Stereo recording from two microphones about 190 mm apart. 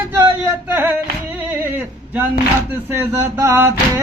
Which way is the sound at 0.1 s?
10° right (ahead or behind).